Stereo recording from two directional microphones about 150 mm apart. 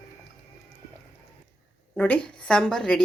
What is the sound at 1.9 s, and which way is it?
A woman's voice, 10° left (ahead or behind).